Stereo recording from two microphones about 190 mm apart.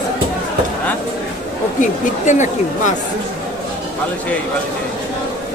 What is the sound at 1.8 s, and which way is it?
Speech, 40° left (ahead or behind).